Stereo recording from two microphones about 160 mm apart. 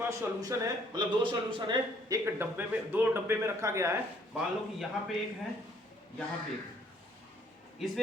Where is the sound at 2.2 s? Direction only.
15° right (ahead or behind).